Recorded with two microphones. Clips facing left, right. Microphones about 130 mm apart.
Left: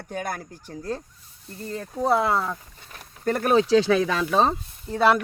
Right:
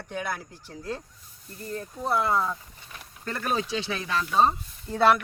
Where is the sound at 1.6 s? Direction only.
80° left; by 3.6 s 60° left (ahead or behind).